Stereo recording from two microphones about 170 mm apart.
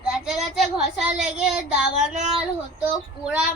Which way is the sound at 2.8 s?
10° right (ahead or behind).